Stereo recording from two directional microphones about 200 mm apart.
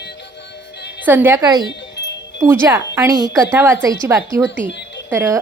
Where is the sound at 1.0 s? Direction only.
10° right (ahead or behind).